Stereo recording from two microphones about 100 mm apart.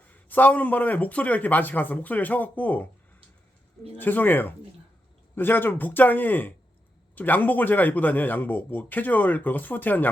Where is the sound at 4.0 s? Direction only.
20° left (ahead or behind).